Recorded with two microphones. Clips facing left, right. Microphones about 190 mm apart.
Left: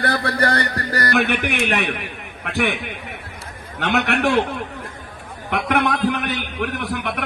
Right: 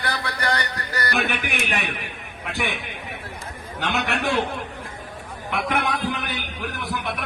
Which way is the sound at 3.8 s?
65° left (ahead or behind).